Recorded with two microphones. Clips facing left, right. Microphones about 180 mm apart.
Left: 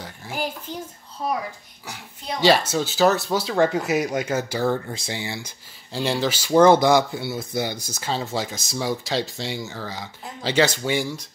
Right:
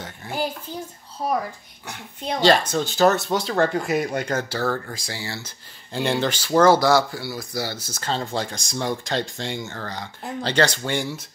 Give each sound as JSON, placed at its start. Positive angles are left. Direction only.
{"t": 0.0, "sound": "a sound", "side_deg": 0}
{"t": 2.4, "sound": "speech", "side_deg": 5}
{"t": 5.9, "sound": "speech", "side_deg": 0}